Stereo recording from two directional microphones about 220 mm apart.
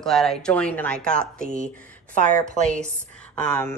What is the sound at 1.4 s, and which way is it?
Speech, 30° left (ahead or behind).